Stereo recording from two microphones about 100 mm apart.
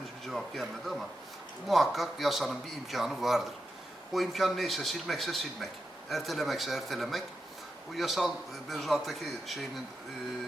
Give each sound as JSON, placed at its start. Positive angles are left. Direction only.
{"t": 0.3, "sound": "a man's voice", "side_deg": 0}